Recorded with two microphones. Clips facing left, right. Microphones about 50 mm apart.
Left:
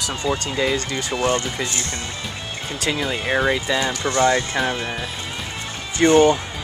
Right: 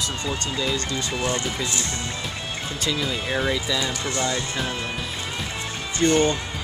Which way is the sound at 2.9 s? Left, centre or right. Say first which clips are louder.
Left 6 dB; left.